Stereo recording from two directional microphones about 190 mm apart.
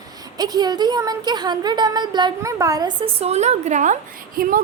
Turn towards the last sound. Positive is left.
turn(degrees=-50)  # may be behind; listen again after turning